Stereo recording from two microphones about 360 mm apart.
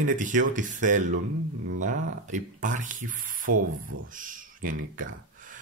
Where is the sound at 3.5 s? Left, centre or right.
Right.